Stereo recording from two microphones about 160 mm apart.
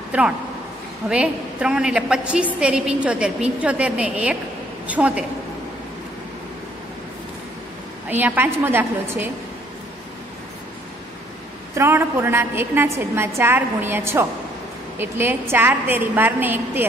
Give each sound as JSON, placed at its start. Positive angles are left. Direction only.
{"t": 0.1, "sound": "a woman's voice", "side_deg": -10}
{"t": 8.1, "sound": "a woman's voice", "side_deg": -10}
{"t": 11.7, "sound": "a woman's voice", "side_deg": -15}